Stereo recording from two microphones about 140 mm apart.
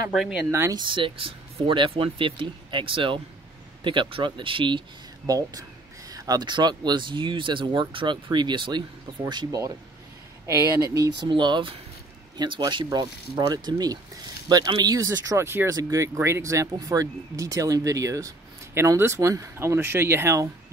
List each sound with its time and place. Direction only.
0.1 s speech: 5° right (ahead or behind)
0.5 s speech: 20° right (ahead or behind)
0.7 s speech: 35° right (ahead or behind)
11.2 s speech: 35° right (ahead or behind); by 20.4 s 20° right (ahead or behind)